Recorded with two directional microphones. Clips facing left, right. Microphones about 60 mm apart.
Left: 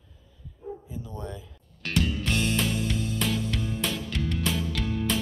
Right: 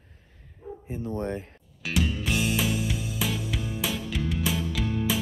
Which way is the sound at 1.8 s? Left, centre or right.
Centre.